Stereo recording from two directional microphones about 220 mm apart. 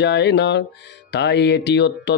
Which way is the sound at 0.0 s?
50° left (ahead or behind).